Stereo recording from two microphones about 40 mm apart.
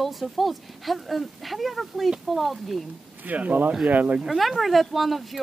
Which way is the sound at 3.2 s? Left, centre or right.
Right.